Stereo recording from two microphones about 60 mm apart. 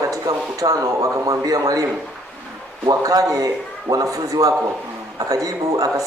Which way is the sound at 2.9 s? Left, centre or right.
Right.